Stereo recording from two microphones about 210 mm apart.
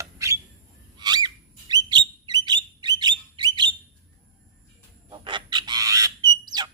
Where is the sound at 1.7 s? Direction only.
20° right (ahead or behind).